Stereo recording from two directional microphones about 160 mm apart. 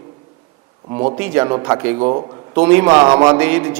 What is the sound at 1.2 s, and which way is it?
A man's voice, 15° right (ahead or behind).